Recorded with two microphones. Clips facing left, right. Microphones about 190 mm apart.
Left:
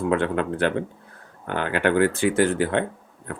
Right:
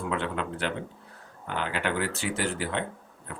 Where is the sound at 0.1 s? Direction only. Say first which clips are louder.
Left 7 dB; 55° left (ahead or behind).